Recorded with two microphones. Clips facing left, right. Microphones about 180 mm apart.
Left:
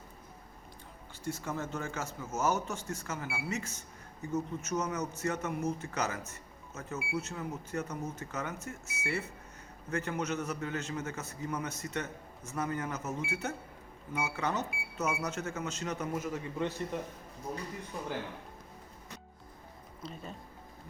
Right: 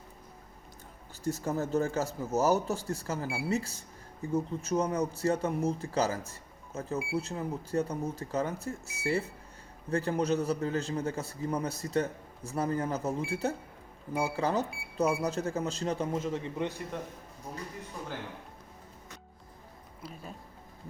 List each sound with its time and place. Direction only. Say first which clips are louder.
1.2 s a man's voice: right 5 dB; 40° right (ahead or behind); by 16.7 s 20° right (ahead or behind)
16.9 s speech: left 1 dB; 5° left (ahead or behind)
20.0 s speech: left 1 dB; 5° right (ahead or behind)